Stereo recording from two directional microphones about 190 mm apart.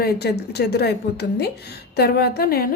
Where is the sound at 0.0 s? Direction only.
60° left (ahead or behind).